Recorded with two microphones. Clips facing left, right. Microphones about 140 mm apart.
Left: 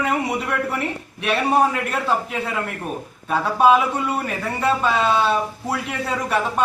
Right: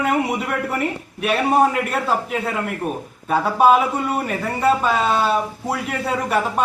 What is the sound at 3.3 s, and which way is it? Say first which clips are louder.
Speech: right 1 dB; 5° right (ahead or behind).